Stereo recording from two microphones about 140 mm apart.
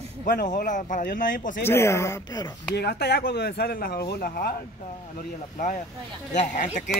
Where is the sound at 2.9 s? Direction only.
90° left.